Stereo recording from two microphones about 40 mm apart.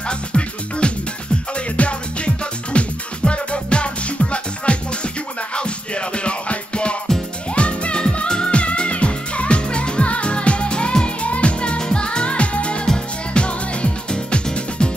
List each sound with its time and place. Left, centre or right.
0.3 s music: left